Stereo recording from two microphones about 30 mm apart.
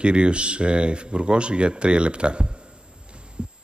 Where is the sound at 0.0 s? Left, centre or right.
Right.